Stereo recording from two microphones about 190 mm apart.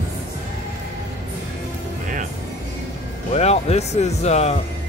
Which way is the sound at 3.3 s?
35° left (ahead or behind).